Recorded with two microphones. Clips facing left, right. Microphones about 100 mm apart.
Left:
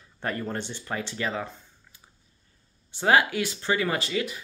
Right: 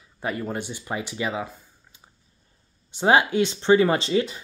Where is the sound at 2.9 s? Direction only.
20° right (ahead or behind).